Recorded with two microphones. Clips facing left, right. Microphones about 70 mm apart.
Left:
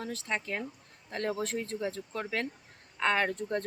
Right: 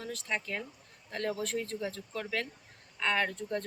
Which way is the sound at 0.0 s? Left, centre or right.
Left.